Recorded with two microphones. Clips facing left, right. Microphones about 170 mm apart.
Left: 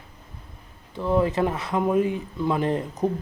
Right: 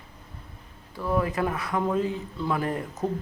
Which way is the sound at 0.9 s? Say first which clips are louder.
Left 4 dB; 25° left (ahead or behind).